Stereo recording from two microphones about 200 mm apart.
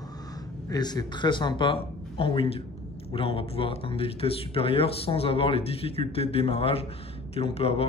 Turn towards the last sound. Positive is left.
turn(degrees=30)  # may be behind; listen again after turning